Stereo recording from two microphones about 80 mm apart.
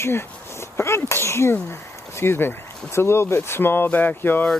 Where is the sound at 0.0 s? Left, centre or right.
Left.